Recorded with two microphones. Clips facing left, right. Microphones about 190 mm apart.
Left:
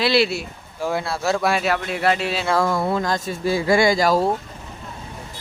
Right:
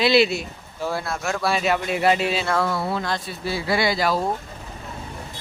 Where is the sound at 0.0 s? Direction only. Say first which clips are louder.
Right 1 dB; centre (ahead or behind).